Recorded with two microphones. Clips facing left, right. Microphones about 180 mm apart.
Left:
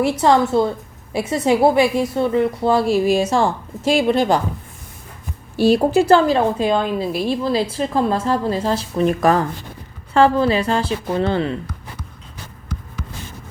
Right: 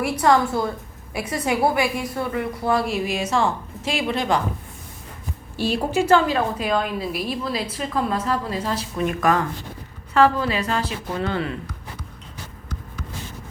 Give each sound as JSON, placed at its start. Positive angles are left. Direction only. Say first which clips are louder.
{"t": 0.0, "sound": "a woman's voice", "louder": "left 3 dB", "side_deg": 25}
{"t": 5.6, "sound": "a woman's voice", "louder": "left 7 dB", "side_deg": 35}